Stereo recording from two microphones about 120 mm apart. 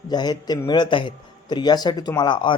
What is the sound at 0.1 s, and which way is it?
Speech, 35° left (ahead or behind).